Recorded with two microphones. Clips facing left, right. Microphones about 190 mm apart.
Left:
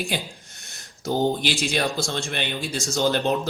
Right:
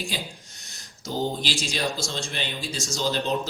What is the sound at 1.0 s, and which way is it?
Speech, 55° left (ahead or behind).